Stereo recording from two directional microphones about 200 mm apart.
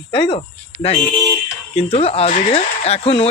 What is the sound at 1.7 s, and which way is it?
Speech, 30° left (ahead or behind).